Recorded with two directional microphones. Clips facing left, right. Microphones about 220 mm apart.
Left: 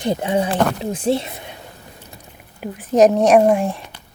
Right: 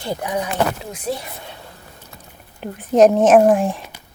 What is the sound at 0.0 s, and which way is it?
Speech, 20° left (ahead or behind).